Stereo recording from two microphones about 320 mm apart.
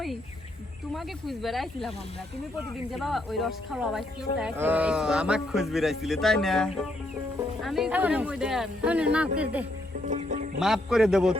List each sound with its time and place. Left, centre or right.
0.9 s speech: centre
2.9 s speech: centre
10.1 s music: right
10.6 s speech: centre